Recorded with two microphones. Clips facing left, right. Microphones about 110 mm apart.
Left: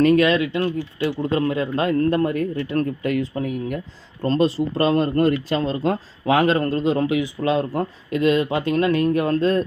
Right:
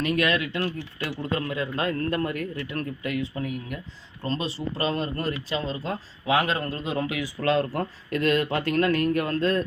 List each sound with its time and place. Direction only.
0.0 s speech: 30° left (ahead or behind)